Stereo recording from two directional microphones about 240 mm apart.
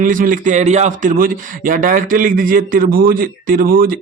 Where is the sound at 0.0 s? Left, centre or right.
Right.